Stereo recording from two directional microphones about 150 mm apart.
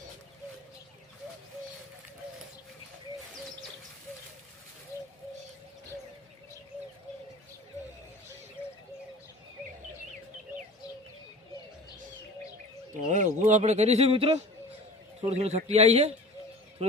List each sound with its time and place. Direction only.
4.9 s bird: 20° left (ahead or behind)
13.1 s speech: 55° right (ahead or behind)